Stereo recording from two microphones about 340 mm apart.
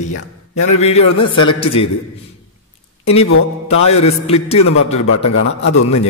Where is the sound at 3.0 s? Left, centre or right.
Centre.